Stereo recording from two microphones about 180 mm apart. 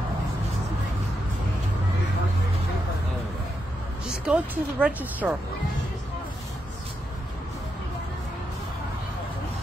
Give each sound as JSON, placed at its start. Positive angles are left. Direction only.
{"t": 4.3, "sound": "speech", "side_deg": -5}